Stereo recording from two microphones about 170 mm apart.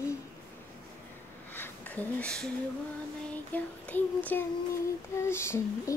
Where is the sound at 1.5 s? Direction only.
10° left (ahead or behind).